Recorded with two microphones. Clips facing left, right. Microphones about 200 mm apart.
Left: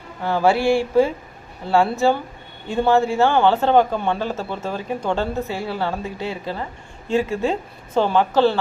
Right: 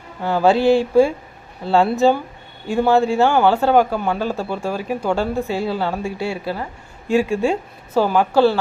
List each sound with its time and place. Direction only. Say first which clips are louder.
0.2 s speech: right 2 dB; 15° right (ahead or behind)